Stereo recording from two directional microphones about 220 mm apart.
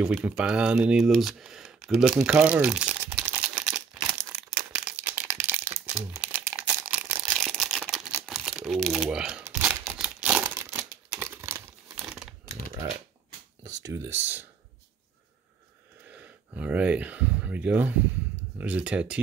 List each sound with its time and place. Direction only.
0.0 s a sound: 5° right (ahead or behind)
5.1 s crumpling: 10° right (ahead or behind)
13.9 s speech: 10° right (ahead or behind)
16.2 s speech: 5° right (ahead or behind)